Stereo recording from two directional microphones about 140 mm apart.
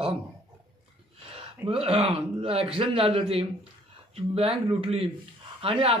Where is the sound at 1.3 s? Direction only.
40° right (ahead or behind).